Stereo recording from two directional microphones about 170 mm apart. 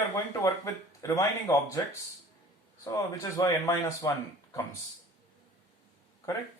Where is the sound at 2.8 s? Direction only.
20° left (ahead or behind).